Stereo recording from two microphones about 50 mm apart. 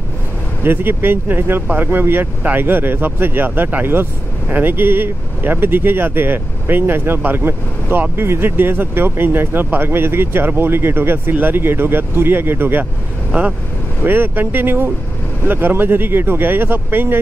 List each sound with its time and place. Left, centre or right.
0.7 s speech: right
13.3 s speech: right
14.0 s speech: right